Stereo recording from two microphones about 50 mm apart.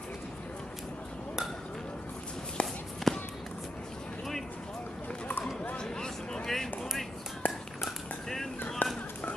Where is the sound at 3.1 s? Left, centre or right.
Centre.